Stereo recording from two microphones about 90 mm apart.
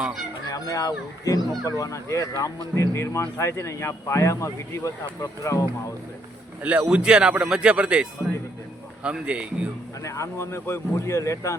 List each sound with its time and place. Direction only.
0.0 s speech: 5° right (ahead or behind)
0.4 s speech: 45° left (ahead or behind)
6.6 s speech: 15° right (ahead or behind)
9.0 s speech: 15° right (ahead or behind)
10.0 s speech: 35° left (ahead or behind)